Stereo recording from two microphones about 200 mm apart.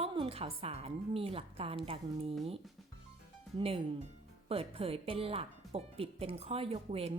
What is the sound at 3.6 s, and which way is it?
A woman's voice, 25° right (ahead or behind).